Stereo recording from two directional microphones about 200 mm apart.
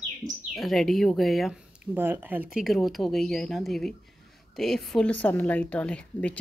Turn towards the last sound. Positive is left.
turn(degrees=5)  # may be behind; listen again after turning